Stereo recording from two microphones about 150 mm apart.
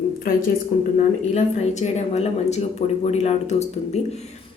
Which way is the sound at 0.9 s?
50° left (ahead or behind).